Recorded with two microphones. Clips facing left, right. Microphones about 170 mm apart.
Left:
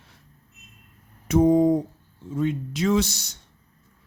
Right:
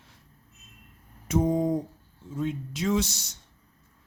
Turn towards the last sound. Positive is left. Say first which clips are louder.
# left 4 dB
turn(degrees=75)  # may be behind; listen again after turning